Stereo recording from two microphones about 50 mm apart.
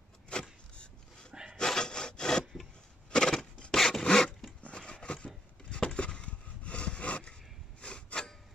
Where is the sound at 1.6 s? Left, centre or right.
Centre.